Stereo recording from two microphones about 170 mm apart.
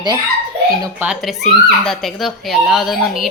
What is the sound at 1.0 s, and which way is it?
Speech, 10° right (ahead or behind).